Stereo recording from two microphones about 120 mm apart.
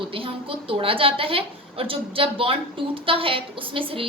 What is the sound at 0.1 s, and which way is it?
A woman's voice, 50° right (ahead or behind).